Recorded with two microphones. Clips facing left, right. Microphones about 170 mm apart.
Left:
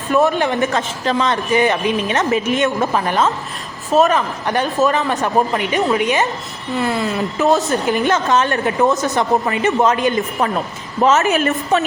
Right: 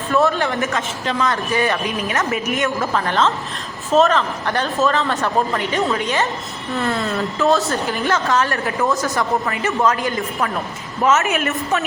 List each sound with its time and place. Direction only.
0.1 s a man's voice: 15° left (ahead or behind)
0.7 s a woman's voice: 35° left (ahead or behind); by 7.2 s 5° left (ahead or behind)
7.2 s a woman's voice: 20° left (ahead or behind)
11.0 s a woman's voice: 30° left (ahead or behind)